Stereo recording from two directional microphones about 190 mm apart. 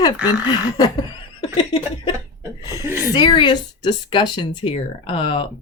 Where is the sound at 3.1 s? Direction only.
25° left (ahead or behind).